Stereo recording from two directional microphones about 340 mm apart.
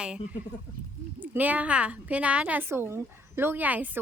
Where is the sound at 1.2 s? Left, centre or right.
Centre.